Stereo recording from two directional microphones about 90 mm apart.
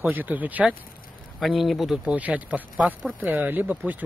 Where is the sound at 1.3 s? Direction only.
Centre (ahead or behind).